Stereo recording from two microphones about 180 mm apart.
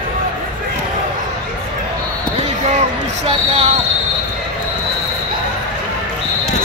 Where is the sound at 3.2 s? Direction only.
35° right (ahead or behind).